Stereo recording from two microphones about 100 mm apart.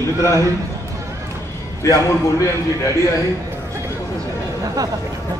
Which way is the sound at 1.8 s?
30° left (ahead or behind).